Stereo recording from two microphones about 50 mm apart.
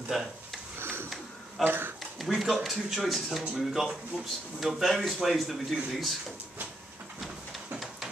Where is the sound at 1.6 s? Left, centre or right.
Right.